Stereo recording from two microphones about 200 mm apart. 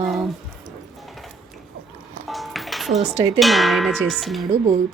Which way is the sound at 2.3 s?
Centre (ahead or behind).